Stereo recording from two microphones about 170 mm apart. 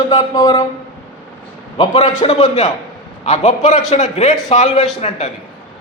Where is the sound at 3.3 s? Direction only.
45° left (ahead or behind).